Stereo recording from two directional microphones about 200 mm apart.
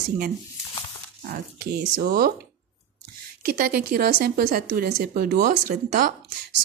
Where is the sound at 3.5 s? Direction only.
45° right (ahead or behind).